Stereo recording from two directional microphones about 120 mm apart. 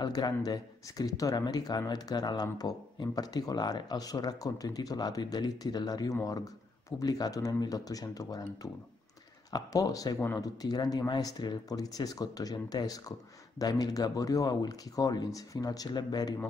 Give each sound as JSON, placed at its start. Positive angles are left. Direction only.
{"t": 0.0, "sound": "speech", "side_deg": 35}
{"t": 9.5, "sound": "speech", "side_deg": 30}